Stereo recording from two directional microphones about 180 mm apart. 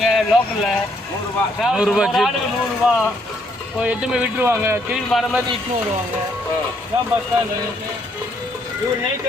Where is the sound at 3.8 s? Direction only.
5° right (ahead or behind).